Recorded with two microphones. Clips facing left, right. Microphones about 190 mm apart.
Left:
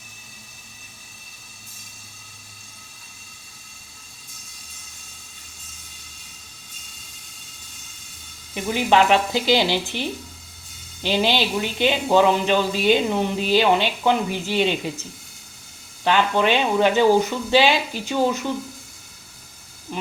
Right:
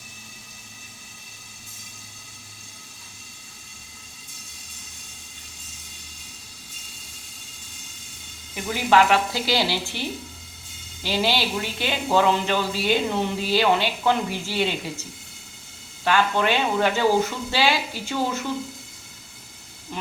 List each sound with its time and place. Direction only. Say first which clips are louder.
8.5 s speech: left 1 dB; 20° left (ahead or behind)
11.0 s speech: left 3 dB; 20° left (ahead or behind)
16.0 s speech: left 2 dB; 20° left (ahead or behind)
19.9 s a sound: left 3 dB; 15° left (ahead or behind)